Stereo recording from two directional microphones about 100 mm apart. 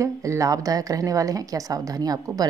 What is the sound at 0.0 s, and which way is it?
A woman's voice, 30° right (ahead or behind).